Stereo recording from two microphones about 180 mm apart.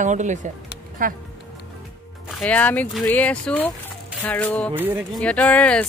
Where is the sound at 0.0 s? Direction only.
40° right (ahead or behind).